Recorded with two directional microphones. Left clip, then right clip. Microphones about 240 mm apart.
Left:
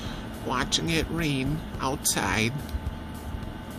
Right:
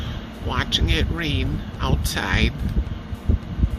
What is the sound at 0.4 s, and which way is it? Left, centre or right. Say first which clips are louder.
Speech: right 3 dB; centre.